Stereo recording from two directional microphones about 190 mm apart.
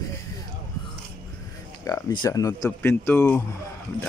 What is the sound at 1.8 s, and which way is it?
Speech, 20° left (ahead or behind).